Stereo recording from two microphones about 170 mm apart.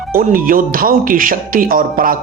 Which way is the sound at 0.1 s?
55° right (ahead or behind).